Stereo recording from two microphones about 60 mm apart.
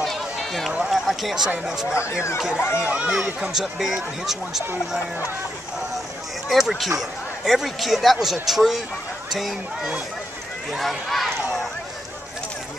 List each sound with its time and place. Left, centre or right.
0.0 s run: centre
0.8 s speech: centre
2.5 s speech: left
2.8 s speech: right
3.5 s speech: centre
6.5 s speech: centre
10.7 s a sound: centre